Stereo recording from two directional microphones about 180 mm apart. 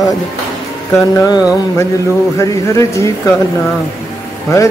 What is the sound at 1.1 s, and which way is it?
Speech, 15° left (ahead or behind).